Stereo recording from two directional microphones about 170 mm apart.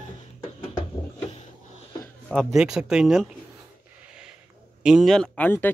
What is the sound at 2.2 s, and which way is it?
Speech, centre (ahead or behind).